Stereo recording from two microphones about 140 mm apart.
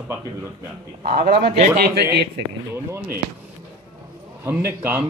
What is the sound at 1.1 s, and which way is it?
Speech, 85° right.